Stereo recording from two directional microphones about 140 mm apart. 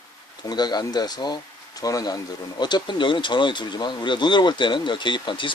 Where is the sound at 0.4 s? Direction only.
30° left (ahead or behind).